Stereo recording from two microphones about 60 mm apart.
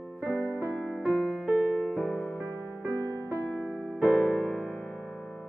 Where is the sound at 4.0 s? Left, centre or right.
Centre.